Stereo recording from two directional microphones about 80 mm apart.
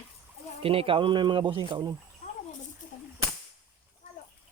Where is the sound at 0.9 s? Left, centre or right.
Right.